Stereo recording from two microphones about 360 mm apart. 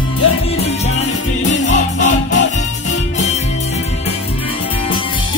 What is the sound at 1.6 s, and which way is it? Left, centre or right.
Music, centre.